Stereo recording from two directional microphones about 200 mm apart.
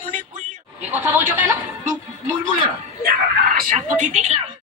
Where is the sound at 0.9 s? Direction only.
10° right (ahead or behind).